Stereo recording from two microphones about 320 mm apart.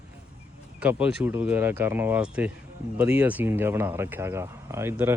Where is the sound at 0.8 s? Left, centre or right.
Centre.